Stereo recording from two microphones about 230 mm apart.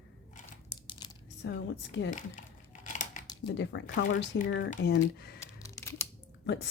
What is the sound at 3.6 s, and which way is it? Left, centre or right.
A woman's voice, left.